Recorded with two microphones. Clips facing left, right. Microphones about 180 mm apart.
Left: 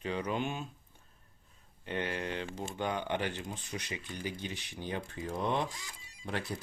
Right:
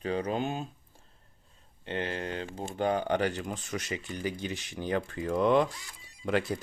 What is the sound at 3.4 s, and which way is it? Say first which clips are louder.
Speech: right 5 dB; 90° right.